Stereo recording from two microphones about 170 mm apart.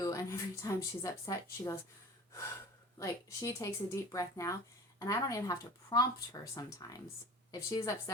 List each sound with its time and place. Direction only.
0.0 s speech: 20° left (ahead or behind)
3.0 s speech: 20° left (ahead or behind)